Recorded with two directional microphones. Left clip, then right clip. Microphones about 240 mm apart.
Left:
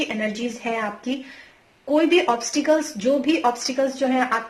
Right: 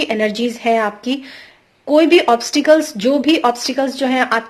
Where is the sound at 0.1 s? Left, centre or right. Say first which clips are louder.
Right 9 dB; right.